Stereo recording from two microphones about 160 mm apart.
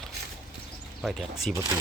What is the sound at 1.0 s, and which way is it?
Speech, centre (ahead or behind).